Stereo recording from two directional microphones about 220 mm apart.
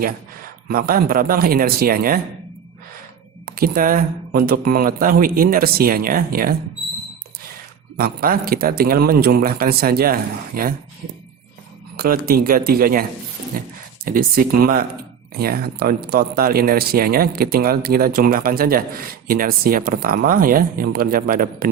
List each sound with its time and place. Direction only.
0.7 s speech: 40° right (ahead or behind)
3.4 s speech: 40° right (ahead or behind)
7.9 s speech: 40° right (ahead or behind)
11.9 s speech: 45° right (ahead or behind)